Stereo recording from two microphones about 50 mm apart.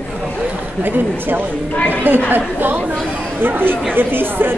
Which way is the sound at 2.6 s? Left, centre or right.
Right.